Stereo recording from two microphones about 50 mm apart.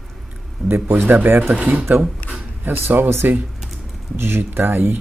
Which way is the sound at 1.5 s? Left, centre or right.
Right.